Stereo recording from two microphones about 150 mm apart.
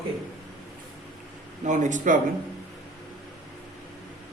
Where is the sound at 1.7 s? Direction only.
55° right (ahead or behind).